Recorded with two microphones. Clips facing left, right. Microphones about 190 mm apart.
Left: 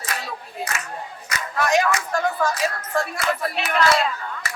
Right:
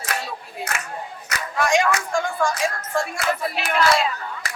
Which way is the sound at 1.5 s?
5° left (ahead or behind).